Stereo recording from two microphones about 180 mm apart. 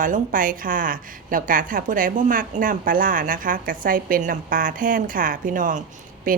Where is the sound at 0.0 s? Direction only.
50° right (ahead or behind).